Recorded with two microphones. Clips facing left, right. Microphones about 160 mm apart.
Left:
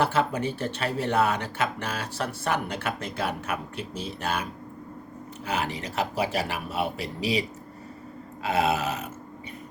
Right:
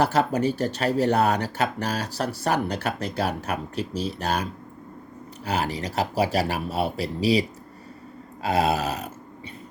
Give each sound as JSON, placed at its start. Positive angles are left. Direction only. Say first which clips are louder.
{"t": 0.0, "sound": "speech", "louder": "right 3 dB", "side_deg": -40}
{"t": 5.5, "sound": "speech", "louder": "right 3 dB", "side_deg": -35}
{"t": 8.4, "sound": "speech", "louder": "right 2 dB", "side_deg": -35}